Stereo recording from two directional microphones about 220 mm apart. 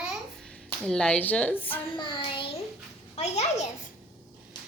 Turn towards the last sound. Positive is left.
turn(degrees=30)  # may be behind; listen again after turning